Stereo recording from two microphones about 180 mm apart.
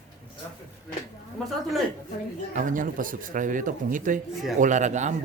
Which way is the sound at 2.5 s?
45° right (ahead or behind).